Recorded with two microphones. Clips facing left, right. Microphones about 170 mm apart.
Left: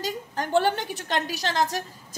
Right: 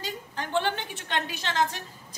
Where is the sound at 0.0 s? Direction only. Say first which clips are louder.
Left 5 dB; 45° left (ahead or behind).